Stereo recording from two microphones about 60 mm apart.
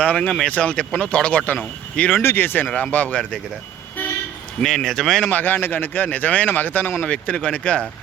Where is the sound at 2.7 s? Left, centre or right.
Left.